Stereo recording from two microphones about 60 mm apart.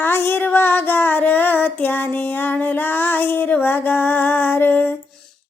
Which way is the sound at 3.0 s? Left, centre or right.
Left.